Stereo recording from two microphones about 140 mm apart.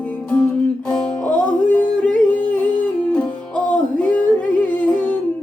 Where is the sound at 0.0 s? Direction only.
10° left (ahead or behind).